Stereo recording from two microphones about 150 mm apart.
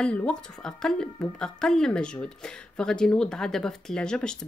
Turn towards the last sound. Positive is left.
turn(degrees=5)  # may be behind; listen again after turning